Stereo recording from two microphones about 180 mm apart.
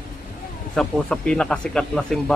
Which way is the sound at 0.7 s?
5° left (ahead or behind).